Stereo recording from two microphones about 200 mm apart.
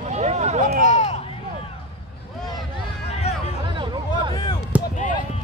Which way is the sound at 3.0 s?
30° left (ahead or behind).